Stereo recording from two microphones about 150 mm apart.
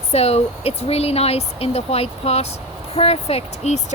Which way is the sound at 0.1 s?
45° left (ahead or behind).